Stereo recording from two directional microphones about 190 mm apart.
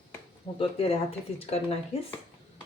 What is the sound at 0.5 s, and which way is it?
Speech, 30° left (ahead or behind).